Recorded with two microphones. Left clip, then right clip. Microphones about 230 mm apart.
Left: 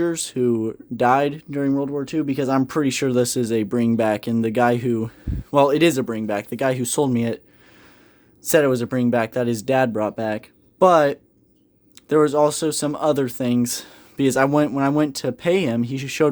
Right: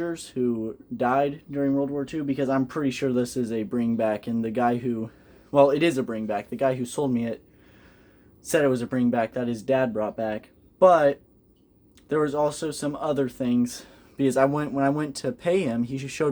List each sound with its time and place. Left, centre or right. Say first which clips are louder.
0.0 s speech: left 6 dB; left
8.4 s speech: left 5 dB; left